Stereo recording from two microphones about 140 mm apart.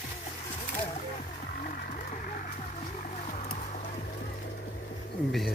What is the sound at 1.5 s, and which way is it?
Music, 90° left.